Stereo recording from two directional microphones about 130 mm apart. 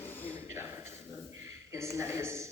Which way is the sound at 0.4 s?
20° right (ahead or behind).